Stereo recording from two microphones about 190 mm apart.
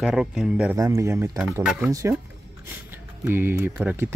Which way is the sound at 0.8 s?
15° right (ahead or behind).